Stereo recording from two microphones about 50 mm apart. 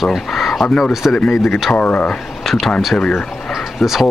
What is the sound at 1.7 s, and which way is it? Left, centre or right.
Speech, left.